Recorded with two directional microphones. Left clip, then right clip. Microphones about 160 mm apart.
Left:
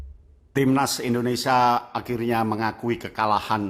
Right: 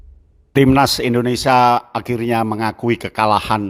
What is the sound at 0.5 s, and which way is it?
A man's voice, 55° right (ahead or behind).